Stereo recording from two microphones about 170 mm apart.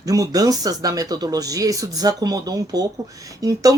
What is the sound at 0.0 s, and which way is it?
Speech, 20° right (ahead or behind).